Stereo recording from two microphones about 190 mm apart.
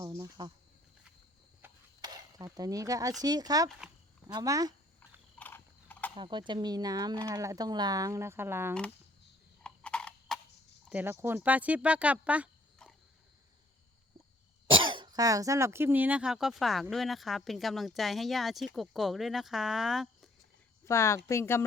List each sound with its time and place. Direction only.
0.0 s insect: 15° right (ahead or behind)
1.6 s a sound: 10° right (ahead or behind)
2.0 s speech: 20° right (ahead or behind)
5.4 s ratchet: 10° left (ahead or behind)
6.1 s speech: 25° right (ahead or behind)
9.6 s a sound: 5° left (ahead or behind)
10.8 s speech: 10° right (ahead or behind)
14.7 s speech: 25° right (ahead or behind); by 20.3 s centre (ahead or behind)
20.8 s speech: 15° left (ahead or behind)